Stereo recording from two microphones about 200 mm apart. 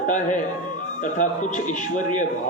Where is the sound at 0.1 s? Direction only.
40° left (ahead or behind).